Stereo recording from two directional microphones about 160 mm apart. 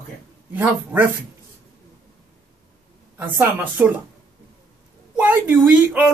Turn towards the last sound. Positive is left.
turn(degrees=-10)  # may be behind; listen again after turning